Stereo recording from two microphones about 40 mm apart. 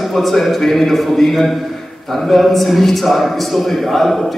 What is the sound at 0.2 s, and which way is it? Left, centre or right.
A man's voice, centre.